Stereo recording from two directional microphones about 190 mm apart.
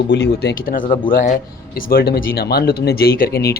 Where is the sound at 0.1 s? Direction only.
60° left (ahead or behind).